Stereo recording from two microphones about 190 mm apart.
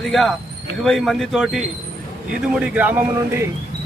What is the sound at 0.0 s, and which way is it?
A man's voice, centre (ahead or behind).